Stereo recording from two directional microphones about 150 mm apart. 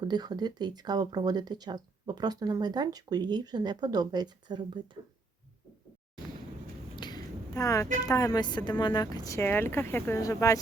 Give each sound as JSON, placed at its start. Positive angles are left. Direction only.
{"t": 0.0, "sound": "speech", "side_deg": -25}
{"t": 6.9, "sound": "a sound", "side_deg": 30}
{"t": 8.0, "sound": "speech", "side_deg": 25}